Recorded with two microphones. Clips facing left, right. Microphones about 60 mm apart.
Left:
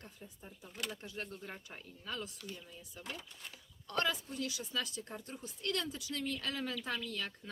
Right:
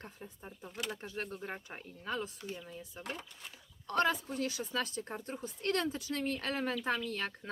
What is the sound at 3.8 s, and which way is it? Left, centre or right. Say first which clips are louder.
Speech: right 5 dB; right.